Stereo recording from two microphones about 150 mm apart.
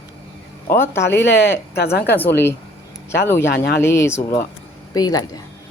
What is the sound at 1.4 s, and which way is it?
Speech, 90° left.